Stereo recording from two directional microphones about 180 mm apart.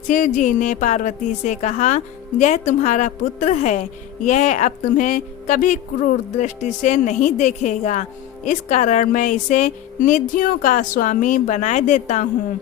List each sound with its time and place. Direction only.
0.1 s a woman's voice: 45° left (ahead or behind)